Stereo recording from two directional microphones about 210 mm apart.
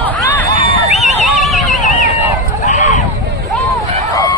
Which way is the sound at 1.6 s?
35° left (ahead or behind).